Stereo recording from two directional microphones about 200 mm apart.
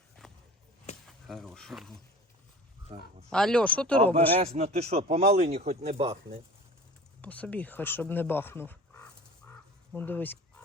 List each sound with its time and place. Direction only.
0.2 s a sound: centre (ahead or behind)
1.0 s speech: centre (ahead or behind)
2.9 s speech: 30° right (ahead or behind)
3.2 s speech: 5° left (ahead or behind)
4.3 s speech: 30° right (ahead or behind)
7.2 s speech: 5° left (ahead or behind)